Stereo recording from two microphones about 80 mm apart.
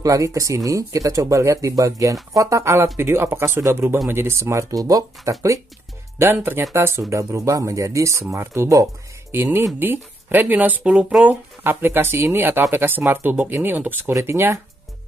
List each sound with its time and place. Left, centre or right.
0.0 s speech: right
6.1 s speech: right
11.2 s speech: right